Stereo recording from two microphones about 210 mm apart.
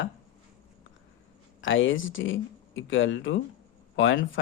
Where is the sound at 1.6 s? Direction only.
65° left (ahead or behind).